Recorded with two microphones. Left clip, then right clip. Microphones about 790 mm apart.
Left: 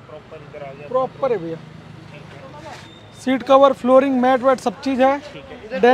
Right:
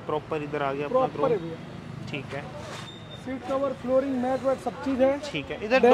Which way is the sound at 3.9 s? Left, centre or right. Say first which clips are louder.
Left 11 dB; left.